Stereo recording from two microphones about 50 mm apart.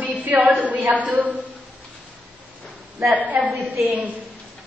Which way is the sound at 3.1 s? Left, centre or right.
Right.